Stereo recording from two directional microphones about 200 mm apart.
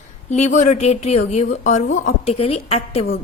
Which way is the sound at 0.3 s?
35° left (ahead or behind).